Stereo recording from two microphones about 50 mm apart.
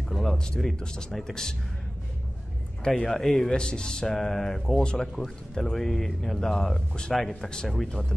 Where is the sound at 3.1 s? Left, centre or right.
Centre.